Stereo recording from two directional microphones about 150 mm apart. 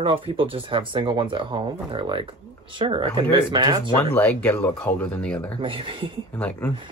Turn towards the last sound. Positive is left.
turn(degrees=10)  # may be behind; listen again after turning